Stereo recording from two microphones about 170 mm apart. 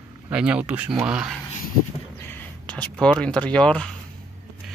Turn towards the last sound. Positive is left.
turn(degrees=5)  # may be behind; listen again after turning